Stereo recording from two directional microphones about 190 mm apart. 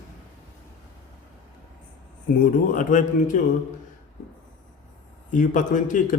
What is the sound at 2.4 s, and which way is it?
Speech, 45° left (ahead or behind).